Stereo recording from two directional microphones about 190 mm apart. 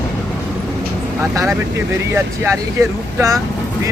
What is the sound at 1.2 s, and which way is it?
Speech, 15° right (ahead or behind).